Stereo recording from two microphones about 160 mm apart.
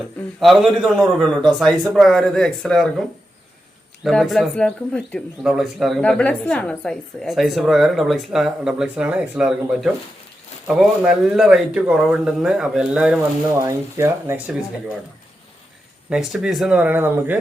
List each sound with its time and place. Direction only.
0.3 s speech: centre (ahead or behind)
4.0 s speech: centre (ahead or behind)
13.6 s speech: 20° right (ahead or behind)
16.0 s speech: 5° right (ahead or behind)